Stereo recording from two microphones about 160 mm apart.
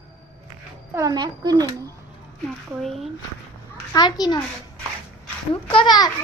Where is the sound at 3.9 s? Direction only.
25° left (ahead or behind).